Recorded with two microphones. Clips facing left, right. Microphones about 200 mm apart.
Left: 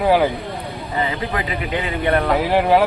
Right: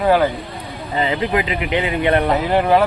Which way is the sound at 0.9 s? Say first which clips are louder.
Right 4 dB; 20° right (ahead or behind).